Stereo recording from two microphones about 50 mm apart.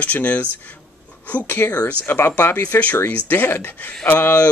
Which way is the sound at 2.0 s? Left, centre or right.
Left.